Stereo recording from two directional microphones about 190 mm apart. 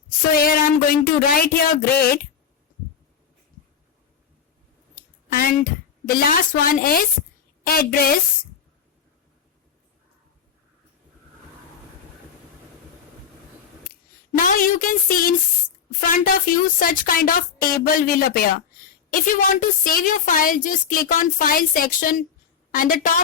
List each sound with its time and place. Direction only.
0.3 s speech: 50° left (ahead or behind)
4.9 s a woman's voice: 50° left (ahead or behind)
14.3 s speech: 45° left (ahead or behind)